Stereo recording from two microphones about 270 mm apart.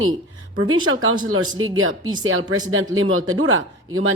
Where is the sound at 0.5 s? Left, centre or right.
Right.